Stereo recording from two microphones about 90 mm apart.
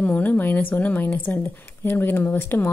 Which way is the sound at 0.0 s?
20° left (ahead or behind).